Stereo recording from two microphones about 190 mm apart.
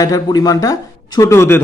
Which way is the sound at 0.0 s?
20° left (ahead or behind).